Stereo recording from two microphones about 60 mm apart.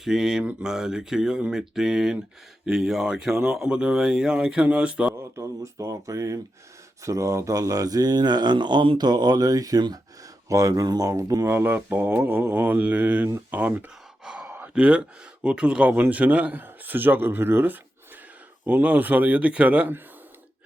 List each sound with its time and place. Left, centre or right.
0.0 s speech: centre
5.1 s speech: right
9.3 s speech: right
10.5 s speech: right
11.5 s speech: right
14.3 s sigh: centre
14.8 s speech: right
15.9 s speech: right